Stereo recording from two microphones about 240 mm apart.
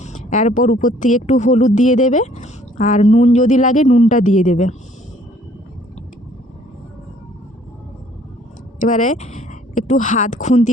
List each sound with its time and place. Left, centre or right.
0.0 s speech: left
8.8 s speech: left